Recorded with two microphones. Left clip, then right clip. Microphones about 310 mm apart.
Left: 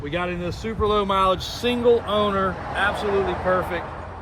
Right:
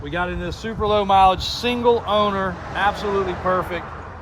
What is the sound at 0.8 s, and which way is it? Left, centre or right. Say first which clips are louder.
Speech: right 5 dB; right.